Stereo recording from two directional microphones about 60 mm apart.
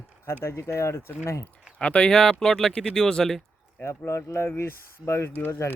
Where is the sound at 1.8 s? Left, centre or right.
Left.